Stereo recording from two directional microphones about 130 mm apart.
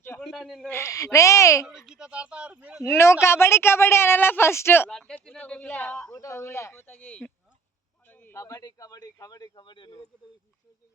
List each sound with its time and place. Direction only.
0.2 s a man's voice: centre (ahead or behind)
0.7 s speech: 20° left (ahead or behind)
1.9 s speech: 10° right (ahead or behind)
2.8 s speech: 20° left (ahead or behind)
4.9 s speech: 5° left (ahead or behind)
6.1 s speech: 25° left (ahead or behind)